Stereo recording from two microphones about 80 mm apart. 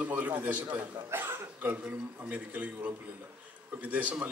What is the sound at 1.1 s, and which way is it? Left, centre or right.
Speech, right.